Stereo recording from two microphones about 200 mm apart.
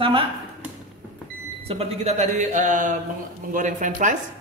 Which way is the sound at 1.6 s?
30° right (ahead or behind).